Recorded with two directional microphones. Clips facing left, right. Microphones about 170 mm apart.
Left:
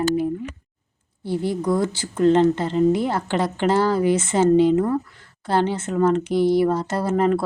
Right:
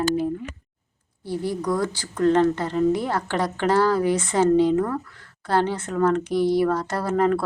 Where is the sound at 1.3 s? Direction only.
25° left (ahead or behind).